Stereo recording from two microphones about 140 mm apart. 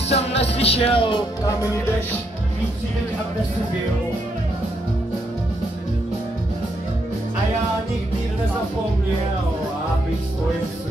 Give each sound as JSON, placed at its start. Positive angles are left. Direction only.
{"t": 0.1, "sound": "music", "side_deg": 50}
{"t": 1.4, "sound": "music", "side_deg": 25}